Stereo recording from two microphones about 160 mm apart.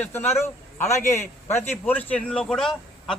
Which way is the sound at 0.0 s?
10° left (ahead or behind).